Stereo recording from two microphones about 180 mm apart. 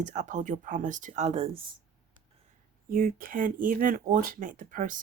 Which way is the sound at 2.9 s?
50° right (ahead or behind).